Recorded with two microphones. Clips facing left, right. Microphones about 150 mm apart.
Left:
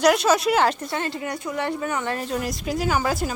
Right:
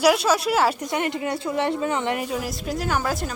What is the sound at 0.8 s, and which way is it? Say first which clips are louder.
Speech: right 3 dB; 20° right (ahead or behind).